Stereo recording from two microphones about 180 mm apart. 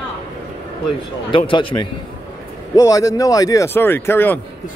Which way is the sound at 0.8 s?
30° left (ahead or behind).